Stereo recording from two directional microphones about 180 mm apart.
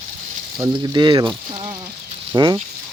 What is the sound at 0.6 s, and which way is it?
Speech, 25° right (ahead or behind).